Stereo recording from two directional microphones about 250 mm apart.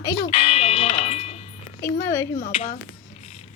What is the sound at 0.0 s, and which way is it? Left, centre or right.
Music, centre.